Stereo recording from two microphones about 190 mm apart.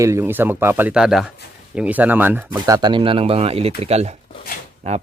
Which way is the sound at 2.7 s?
25° right (ahead or behind).